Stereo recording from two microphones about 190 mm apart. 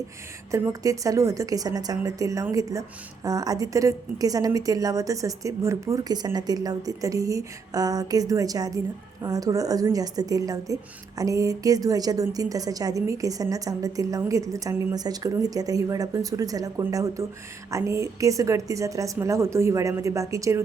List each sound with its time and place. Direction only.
0.5 s a woman's voice: 15° right (ahead or behind)